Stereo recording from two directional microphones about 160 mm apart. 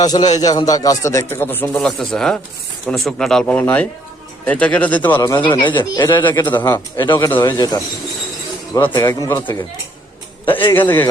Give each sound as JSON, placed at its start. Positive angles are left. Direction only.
{"t": 0.0, "sound": "speech", "side_deg": 25}
{"t": 5.2, "sound": "speech", "side_deg": 25}
{"t": 10.8, "sound": "speech", "side_deg": 15}